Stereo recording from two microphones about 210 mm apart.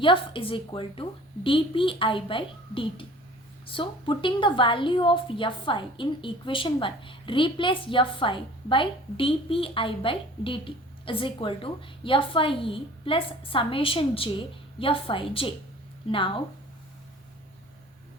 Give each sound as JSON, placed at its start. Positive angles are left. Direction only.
{"t": 0.0, "sound": "a woman's voice", "side_deg": 25}